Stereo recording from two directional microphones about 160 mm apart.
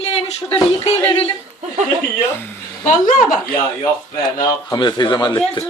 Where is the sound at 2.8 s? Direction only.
55° left (ahead or behind).